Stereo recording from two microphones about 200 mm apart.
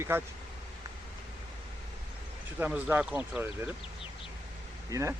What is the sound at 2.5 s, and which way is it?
Speech, 10° right (ahead or behind).